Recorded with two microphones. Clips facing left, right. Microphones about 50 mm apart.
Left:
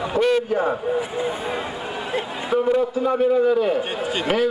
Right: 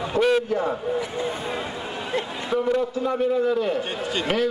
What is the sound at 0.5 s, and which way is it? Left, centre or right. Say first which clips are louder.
A man's voice: left 3 dB; centre.